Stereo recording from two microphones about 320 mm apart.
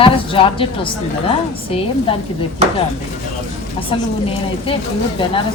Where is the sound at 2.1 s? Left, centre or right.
Centre.